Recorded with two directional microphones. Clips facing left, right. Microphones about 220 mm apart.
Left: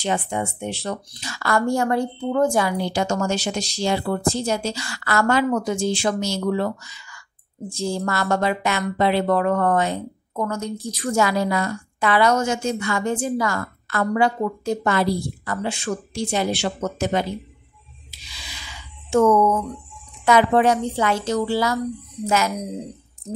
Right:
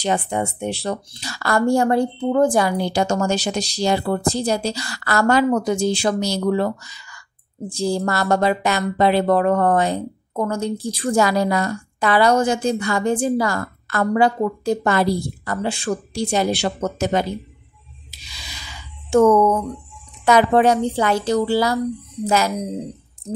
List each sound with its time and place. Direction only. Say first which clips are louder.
0.0 s speech: right 3 dB; 40° right (ahead or behind)
19.0 s speech: right 3 dB; 35° right (ahead or behind)